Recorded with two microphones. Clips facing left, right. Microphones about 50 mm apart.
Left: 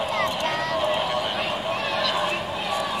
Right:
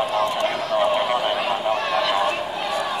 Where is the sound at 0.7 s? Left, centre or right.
Right.